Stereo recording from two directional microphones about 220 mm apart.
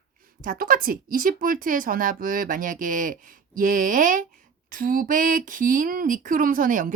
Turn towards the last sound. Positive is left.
turn(degrees=-40)  # may be behind; listen again after turning